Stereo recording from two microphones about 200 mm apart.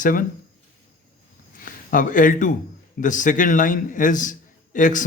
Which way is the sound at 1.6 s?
45° left (ahead or behind).